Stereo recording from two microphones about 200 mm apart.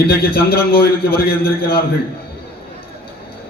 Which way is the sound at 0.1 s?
50° left (ahead or behind).